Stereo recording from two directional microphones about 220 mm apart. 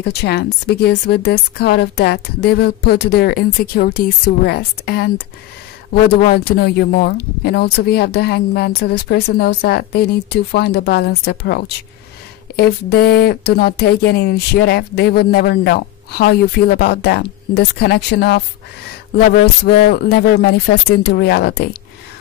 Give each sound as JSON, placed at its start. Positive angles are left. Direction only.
{"t": 0.0, "sound": "speech", "side_deg": 50}